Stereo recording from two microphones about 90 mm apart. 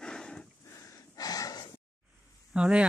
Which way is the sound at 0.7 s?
35° left (ahead or behind).